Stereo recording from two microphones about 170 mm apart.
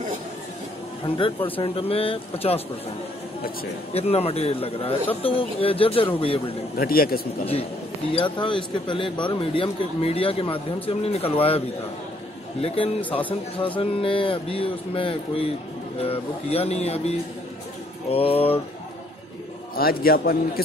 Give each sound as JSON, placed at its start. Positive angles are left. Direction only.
{"t": 1.0, "sound": "speech", "side_deg": 30}
{"t": 3.9, "sound": "speech", "side_deg": 35}
{"t": 6.8, "sound": "a man's voice", "side_deg": 60}
{"t": 8.1, "sound": "speech", "side_deg": 30}
{"t": 12.6, "sound": "speech", "side_deg": 35}
{"t": 18.1, "sound": "speech", "side_deg": 35}
{"t": 19.7, "sound": "a man's voice", "side_deg": 60}